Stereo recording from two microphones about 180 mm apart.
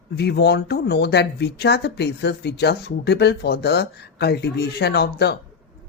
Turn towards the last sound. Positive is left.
turn(degrees=65)  # may be behind; listen again after turning